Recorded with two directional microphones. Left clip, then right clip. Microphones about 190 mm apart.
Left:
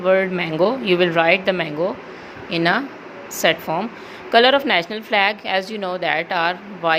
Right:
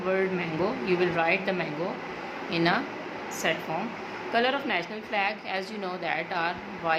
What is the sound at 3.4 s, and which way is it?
A woman's voice, 50° left (ahead or behind).